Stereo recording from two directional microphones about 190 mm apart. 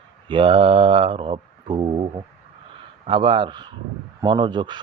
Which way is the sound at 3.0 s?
25° right (ahead or behind).